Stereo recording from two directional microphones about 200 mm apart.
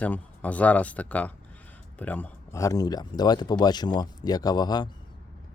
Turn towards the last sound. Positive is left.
turn(degrees=20)  # may be behind; listen again after turning